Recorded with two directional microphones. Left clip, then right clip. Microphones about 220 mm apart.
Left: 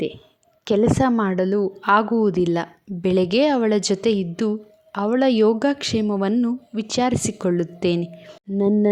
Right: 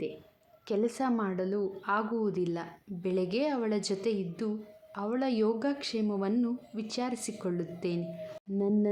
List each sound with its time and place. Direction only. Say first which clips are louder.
0.6 s a woman's voice: left 12 dB; 35° left (ahead or behind)